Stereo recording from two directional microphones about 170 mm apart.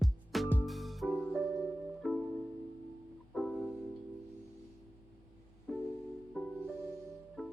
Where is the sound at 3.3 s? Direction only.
5° left (ahead or behind).